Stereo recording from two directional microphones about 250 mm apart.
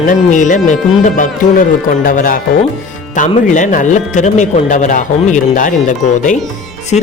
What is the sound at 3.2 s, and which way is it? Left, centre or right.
Music, left.